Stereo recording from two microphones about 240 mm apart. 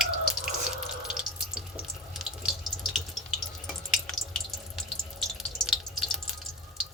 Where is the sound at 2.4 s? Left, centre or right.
Centre.